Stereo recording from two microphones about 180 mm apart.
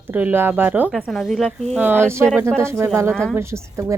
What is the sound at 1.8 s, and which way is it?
Speech, 10° right (ahead or behind).